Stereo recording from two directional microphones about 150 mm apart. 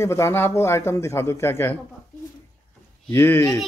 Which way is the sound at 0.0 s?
20° left (ahead or behind).